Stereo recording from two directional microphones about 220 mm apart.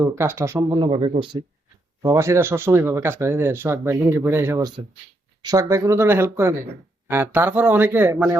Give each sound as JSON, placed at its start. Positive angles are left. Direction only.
{"t": 0.0, "sound": "speech", "side_deg": -10}
{"t": 0.7, "sound": "speech", "side_deg": -20}
{"t": 2.0, "sound": "speech", "side_deg": -15}